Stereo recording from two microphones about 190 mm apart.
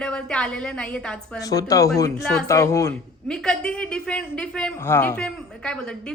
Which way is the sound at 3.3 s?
5° left (ahead or behind).